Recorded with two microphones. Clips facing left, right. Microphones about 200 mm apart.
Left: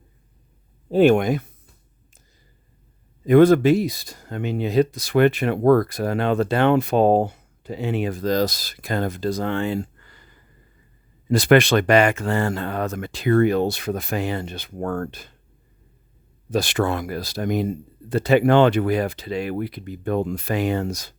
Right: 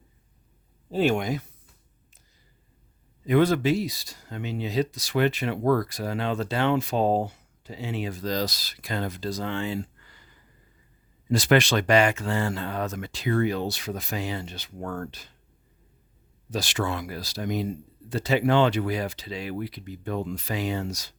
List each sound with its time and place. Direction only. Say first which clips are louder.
0.9 s speech: left 8 dB; 55° left (ahead or behind)
3.2 s speech: left 8 dB; 50° left (ahead or behind)
11.3 s speech: left 6 dB; 55° left (ahead or behind)
16.5 s speech: left 7 dB; 55° left (ahead or behind)